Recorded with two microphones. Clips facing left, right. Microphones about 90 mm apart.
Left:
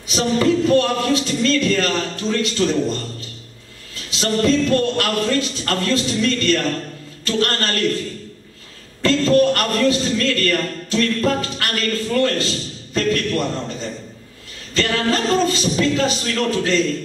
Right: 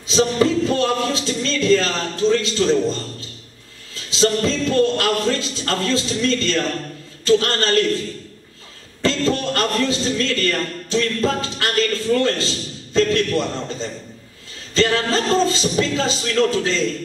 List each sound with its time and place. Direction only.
0.1 s a man's voice: 25° right (ahead or behind)
9.0 s a man's voice: 25° right (ahead or behind)
14.7 s a sound: 30° right (ahead or behind)
15.1 s a man's voice: 25° right (ahead or behind)